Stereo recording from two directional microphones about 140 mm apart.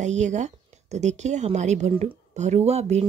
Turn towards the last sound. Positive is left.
turn(degrees=-50)  # may be behind; listen again after turning